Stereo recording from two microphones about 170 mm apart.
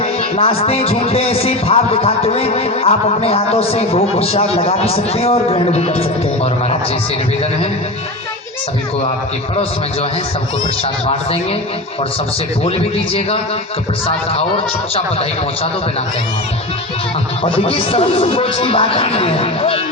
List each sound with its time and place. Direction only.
0.0 s a man's voice: 35° left (ahead or behind)
14.3 s a man's voice: 35° left (ahead or behind)
17.4 s a man's voice: 35° left (ahead or behind)